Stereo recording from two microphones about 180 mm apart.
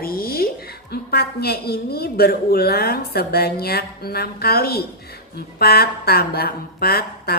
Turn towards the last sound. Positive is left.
turn(degrees=55)  # may be behind; listen again after turning